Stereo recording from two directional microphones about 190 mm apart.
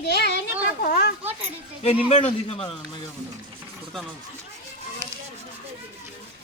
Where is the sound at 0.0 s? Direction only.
60° left (ahead or behind).